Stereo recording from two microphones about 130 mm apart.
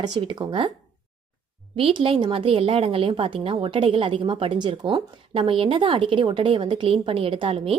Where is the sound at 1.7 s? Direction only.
45° right (ahead or behind).